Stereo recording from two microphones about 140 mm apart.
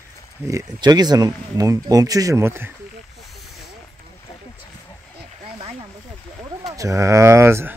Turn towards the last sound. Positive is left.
turn(degrees=-15)  # may be behind; listen again after turning